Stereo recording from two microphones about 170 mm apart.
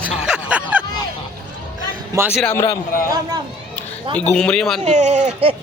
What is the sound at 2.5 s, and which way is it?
Speech, 20° left (ahead or behind).